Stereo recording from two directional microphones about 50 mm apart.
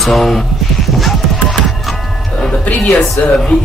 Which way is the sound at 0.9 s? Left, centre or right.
Centre.